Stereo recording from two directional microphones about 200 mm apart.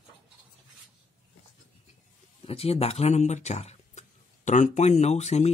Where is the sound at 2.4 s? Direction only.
30° left (ahead or behind).